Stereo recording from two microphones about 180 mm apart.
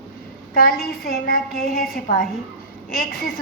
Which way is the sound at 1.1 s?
55° left (ahead or behind).